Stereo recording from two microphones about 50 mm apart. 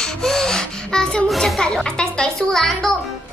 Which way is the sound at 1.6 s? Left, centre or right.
Centre.